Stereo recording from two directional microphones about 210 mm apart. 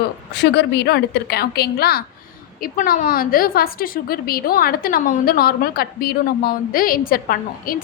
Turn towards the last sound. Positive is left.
turn(degrees=40)  # may be behind; listen again after turning